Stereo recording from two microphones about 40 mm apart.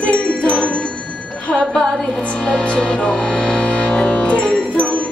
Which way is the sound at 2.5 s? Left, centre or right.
Left.